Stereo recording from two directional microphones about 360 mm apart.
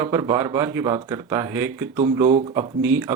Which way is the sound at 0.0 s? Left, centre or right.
Centre.